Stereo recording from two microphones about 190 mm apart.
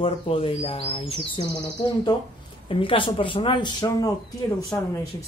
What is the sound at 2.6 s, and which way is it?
Speech, 30° left (ahead or behind).